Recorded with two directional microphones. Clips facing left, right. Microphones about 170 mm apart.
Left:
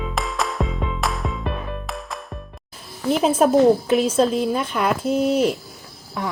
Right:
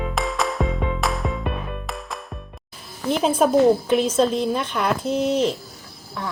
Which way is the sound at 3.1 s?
5° left (ahead or behind).